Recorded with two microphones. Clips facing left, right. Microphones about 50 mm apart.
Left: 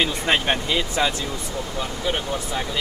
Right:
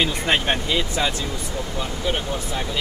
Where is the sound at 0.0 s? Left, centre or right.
Centre.